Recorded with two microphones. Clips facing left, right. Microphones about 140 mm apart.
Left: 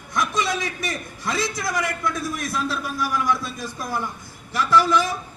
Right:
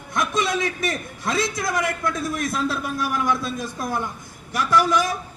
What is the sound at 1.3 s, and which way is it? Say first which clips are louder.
A man's voice: right 2 dB; 25° right (ahead or behind).